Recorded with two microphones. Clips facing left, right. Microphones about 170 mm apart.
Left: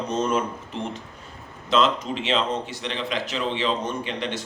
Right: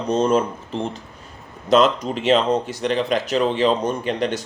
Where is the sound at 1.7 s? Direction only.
45° right (ahead or behind).